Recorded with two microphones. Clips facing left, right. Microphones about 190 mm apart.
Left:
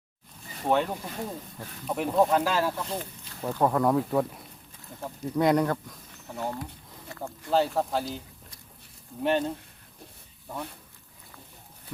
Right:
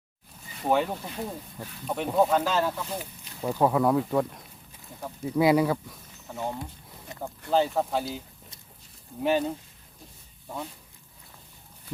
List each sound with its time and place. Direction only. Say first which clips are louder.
0.6 s speech: even; 5° right (ahead or behind)
3.0 s speech: right 1 dB; 10° right (ahead or behind)
7.1 s a sound: right 1 dB; 20° right (ahead or behind)
7.5 s speech: right 1 dB; centre (ahead or behind)
9.2 s speech: right 1 dB; 5° right (ahead or behind)